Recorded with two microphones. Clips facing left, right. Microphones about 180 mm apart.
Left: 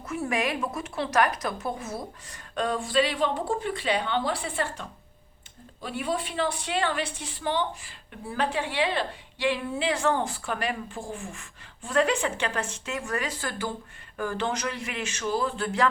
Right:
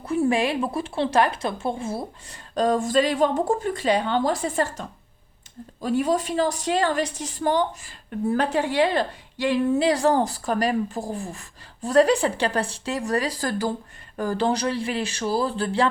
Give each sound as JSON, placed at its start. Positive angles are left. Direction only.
{"t": 0.0, "sound": "a woman's voice", "side_deg": -30}